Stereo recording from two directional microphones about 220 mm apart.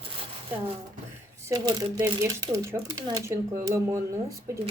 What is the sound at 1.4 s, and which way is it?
Speech, 15° right (ahead or behind).